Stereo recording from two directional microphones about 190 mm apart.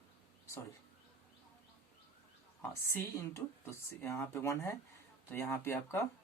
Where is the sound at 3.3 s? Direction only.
15° left (ahead or behind).